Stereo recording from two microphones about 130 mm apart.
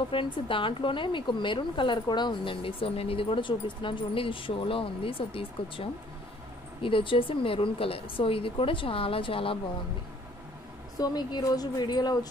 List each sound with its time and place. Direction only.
0.1 s a woman's voice: 40° left (ahead or behind)
11.0 s a woman's voice: 30° left (ahead or behind)